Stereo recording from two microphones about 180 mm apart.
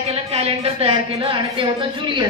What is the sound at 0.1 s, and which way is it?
A woman's voice, 35° right (ahead or behind).